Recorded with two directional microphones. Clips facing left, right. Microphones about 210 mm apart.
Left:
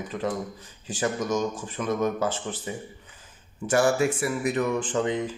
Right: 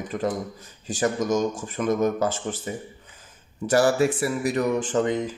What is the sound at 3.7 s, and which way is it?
Speech, 35° right (ahead or behind).